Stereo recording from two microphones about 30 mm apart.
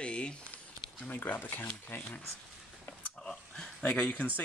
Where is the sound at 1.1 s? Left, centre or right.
Left.